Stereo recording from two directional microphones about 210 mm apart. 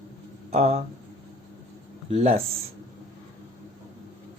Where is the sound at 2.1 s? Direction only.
30° right (ahead or behind).